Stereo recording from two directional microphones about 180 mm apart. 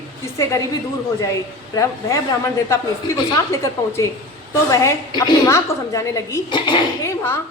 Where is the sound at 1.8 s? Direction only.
15° left (ahead or behind).